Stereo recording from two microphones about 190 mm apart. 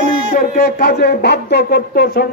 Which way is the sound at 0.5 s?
55° left (ahead or behind).